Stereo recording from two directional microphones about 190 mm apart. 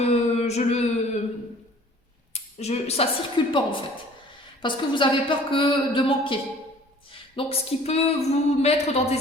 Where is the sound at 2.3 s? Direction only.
35° left (ahead or behind).